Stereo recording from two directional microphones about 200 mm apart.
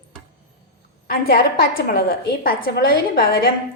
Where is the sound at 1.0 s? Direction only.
50° left (ahead or behind).